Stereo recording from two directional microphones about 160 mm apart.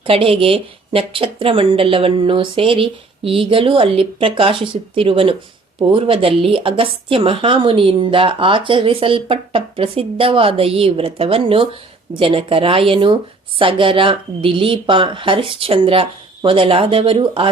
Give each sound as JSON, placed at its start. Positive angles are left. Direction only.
{"t": 0.0, "sound": "a woman's voice", "side_deg": -35}